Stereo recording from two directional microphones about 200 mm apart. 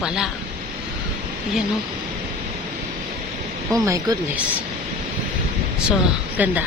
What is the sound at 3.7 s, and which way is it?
Speech, 15° right (ahead or behind).